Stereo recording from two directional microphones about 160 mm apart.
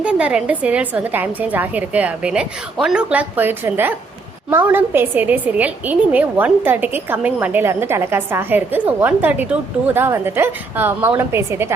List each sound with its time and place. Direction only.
0.0 s a woman's voice: 5° right (ahead or behind)